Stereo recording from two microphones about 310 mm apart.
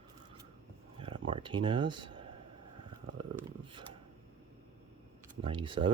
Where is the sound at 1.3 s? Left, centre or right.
Centre.